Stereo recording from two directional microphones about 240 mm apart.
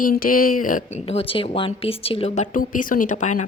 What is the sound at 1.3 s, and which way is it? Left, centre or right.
Speech, left.